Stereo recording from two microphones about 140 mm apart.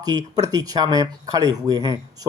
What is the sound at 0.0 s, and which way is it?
Speech, 30° right (ahead or behind).